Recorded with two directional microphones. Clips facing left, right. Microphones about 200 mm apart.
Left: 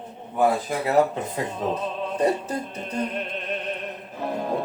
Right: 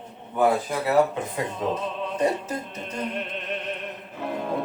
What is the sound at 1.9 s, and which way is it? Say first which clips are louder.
Music: left 3 dB; 35° left (ahead or behind).